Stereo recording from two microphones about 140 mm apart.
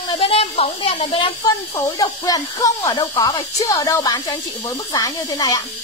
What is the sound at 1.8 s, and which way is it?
Speech, 25° left (ahead or behind).